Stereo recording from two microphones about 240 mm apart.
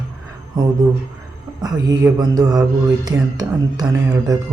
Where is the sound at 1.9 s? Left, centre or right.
Centre.